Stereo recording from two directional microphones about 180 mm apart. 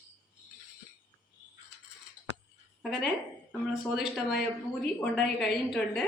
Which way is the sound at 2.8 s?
Centre (ahead or behind).